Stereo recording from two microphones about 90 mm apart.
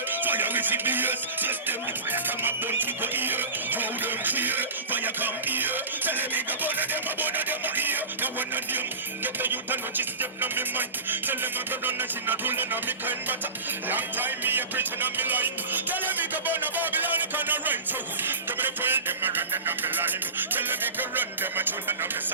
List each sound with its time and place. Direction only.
0.1 s music: 20° right (ahead or behind)